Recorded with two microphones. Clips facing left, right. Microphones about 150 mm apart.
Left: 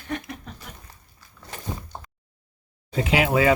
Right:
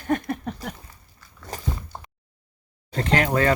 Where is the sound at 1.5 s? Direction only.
40° right (ahead or behind).